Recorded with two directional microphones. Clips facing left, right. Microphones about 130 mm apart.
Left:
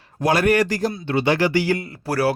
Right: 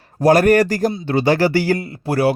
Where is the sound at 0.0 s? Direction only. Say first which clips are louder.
Right 6 dB; 45° right (ahead or behind).